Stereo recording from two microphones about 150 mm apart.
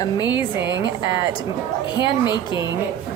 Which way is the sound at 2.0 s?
30° left (ahead or behind).